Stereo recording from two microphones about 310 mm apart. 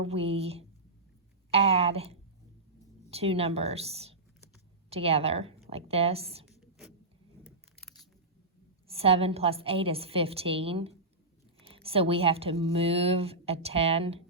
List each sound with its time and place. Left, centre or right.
0.0 s a woman's voice: centre
7.4 s keys jangling: centre
8.9 s a woman's voice: centre